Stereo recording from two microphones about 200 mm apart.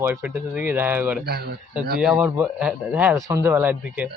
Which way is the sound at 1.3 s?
50° right (ahead or behind).